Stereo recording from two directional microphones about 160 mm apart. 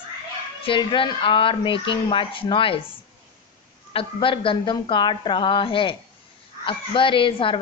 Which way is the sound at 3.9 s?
35° left (ahead or behind).